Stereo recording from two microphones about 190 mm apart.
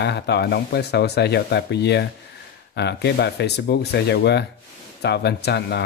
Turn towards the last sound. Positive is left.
turn(degrees=60)  # may be behind; listen again after turning